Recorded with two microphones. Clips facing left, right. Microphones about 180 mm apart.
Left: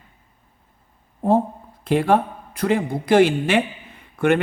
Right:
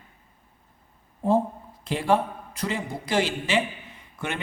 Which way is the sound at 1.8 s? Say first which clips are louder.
Left 5 dB; 55° left (ahead or behind).